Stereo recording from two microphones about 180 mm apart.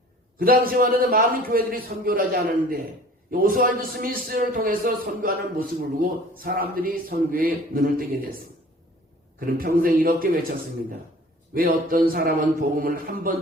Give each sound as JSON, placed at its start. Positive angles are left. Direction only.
{"t": 0.3, "sound": "a man's voice", "side_deg": -55}
{"t": 3.3, "sound": "a man's voice", "side_deg": -50}
{"t": 9.6, "sound": "a man's voice", "side_deg": -55}
{"t": 11.5, "sound": "a man's voice", "side_deg": -50}